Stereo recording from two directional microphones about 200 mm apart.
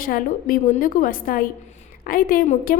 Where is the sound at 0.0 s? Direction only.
45° left (ahead or behind).